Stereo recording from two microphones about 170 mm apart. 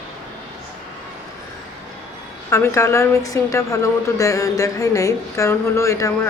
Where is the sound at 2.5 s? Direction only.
15° left (ahead or behind).